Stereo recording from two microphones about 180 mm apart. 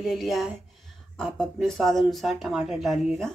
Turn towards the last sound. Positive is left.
turn(degrees=0)  # may be behind; listen again after turning